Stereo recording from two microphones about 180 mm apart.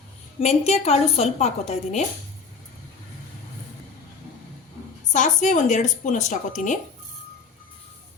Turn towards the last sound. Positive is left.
turn(degrees=45)  # may be behind; listen again after turning